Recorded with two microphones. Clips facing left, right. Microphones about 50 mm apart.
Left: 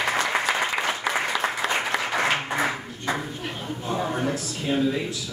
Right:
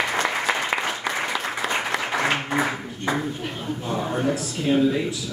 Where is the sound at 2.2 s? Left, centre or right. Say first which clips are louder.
Right 1 dB; centre.